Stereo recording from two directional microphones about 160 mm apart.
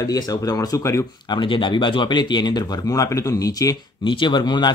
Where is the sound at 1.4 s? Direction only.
30° left (ahead or behind).